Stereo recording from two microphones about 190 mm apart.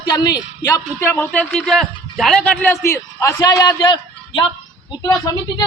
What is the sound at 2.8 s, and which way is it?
A man's voice, 15° left (ahead or behind).